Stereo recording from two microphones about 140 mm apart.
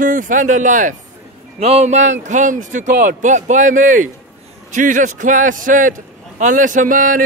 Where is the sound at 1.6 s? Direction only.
50° right (ahead or behind).